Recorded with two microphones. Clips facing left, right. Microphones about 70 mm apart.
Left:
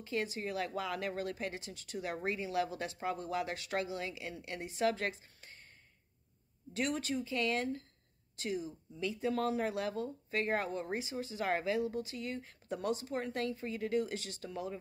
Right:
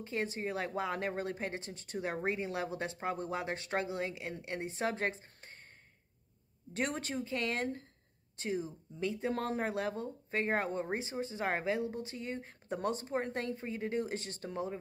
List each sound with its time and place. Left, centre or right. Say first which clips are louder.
0.0 s a woman's voice: right 1 dB; right
6.7 s speech: left 1 dB; right